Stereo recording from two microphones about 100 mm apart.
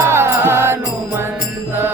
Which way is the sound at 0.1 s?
25° right (ahead or behind).